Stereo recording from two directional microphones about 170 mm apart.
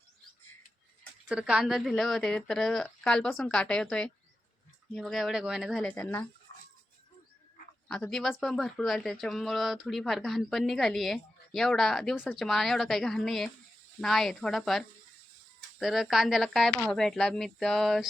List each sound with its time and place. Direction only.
1.3 s speech: 5° right (ahead or behind); by 6.2 s 10° left (ahead or behind)
7.9 s speech: 5° left (ahead or behind)